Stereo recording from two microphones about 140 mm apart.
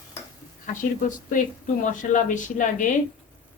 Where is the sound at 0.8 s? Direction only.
70° left (ahead or behind).